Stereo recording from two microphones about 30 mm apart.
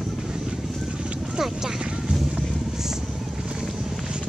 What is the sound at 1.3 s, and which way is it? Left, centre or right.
Vehicle, centre.